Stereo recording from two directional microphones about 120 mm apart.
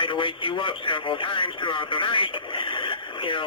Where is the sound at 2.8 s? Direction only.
45° left (ahead or behind).